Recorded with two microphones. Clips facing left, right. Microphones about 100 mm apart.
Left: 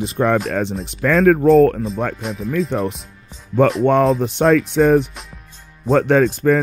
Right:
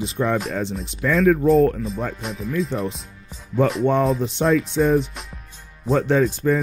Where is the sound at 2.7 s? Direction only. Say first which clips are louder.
Left 4 dB; 70° left (ahead or behind).